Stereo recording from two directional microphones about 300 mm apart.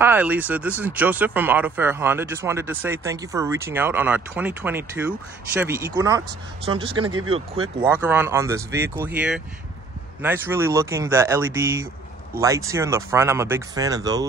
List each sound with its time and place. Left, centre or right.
0.0 s speech: centre
7.1 s speech: right
7.8 s speech: centre